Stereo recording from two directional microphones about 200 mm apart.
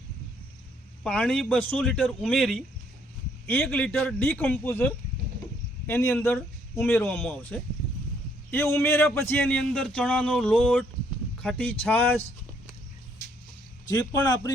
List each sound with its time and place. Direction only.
1.0 s a man's voice: 5° left (ahead or behind)
13.8 s a man's voice: 20° left (ahead or behind)